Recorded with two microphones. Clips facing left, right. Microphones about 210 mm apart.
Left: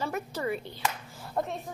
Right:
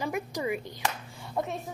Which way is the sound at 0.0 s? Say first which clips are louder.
Right 1 dB; 15° right (ahead or behind).